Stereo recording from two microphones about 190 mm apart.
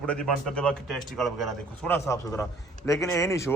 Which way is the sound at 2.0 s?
15° left (ahead or behind).